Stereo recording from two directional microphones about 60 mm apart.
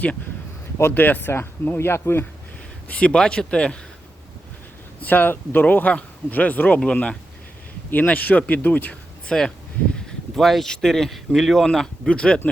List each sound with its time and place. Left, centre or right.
0.9 s speech: left
2.9 s speech: centre
5.0 s speech: left
9.2 s speech: centre
12.0 s speech: centre